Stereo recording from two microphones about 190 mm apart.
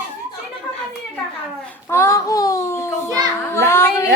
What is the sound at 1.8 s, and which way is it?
Child singing, 15° left (ahead or behind).